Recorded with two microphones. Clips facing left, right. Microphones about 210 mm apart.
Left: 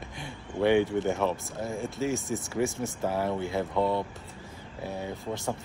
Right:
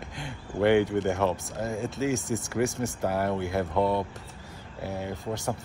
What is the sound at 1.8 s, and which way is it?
Speech, 20° right (ahead or behind).